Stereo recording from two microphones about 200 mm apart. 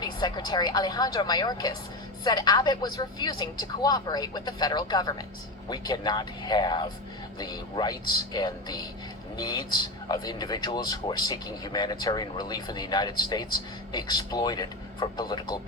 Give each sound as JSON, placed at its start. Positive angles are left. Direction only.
{"t": 0.0, "sound": "speech", "side_deg": 20}